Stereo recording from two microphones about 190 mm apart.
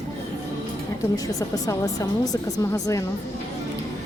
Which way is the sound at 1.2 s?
20° left (ahead or behind).